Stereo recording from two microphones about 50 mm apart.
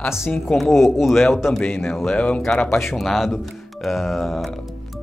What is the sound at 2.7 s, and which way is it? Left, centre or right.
Speech, left.